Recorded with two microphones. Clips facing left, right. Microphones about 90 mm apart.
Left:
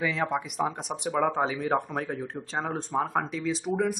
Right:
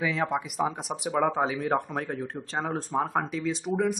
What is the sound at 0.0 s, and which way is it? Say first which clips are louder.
Speech: even; centre (ahead or behind).